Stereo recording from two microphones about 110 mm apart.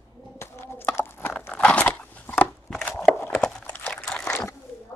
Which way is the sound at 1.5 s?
10° left (ahead or behind).